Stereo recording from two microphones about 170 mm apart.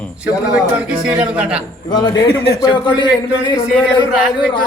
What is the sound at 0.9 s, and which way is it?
Speech, 5° right (ahead or behind).